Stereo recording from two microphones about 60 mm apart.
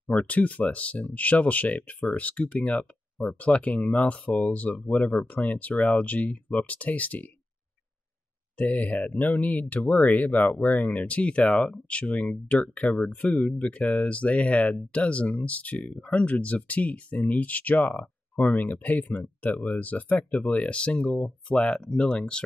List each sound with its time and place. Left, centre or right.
0.1 s speech: left
8.5 s speech: left